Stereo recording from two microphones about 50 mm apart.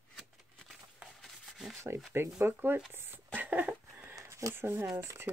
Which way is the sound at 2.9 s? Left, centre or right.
Right.